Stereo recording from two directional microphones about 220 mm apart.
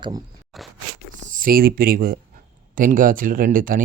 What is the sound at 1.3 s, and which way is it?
Speech, 40° right (ahead or behind).